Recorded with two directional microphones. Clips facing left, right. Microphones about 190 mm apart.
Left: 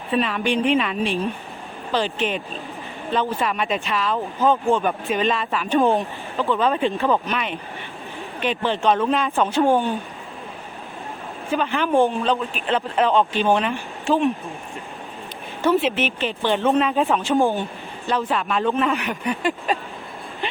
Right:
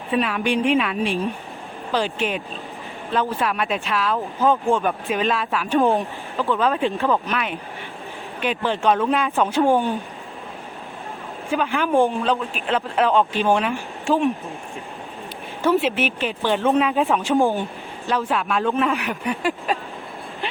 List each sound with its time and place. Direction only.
0.1 s speech: 5° right (ahead or behind)
11.5 s speech: 5° right (ahead or behind)
15.6 s speech: 10° right (ahead or behind)
17.5 s a sound: 5° right (ahead or behind)
18.3 s speech: 5° right (ahead or behind)